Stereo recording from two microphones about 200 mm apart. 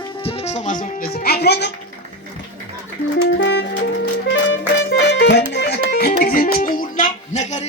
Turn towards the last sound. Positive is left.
turn(degrees=35)  # may be behind; listen again after turning